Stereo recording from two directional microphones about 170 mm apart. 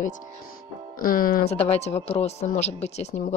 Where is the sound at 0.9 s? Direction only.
55° left (ahead or behind).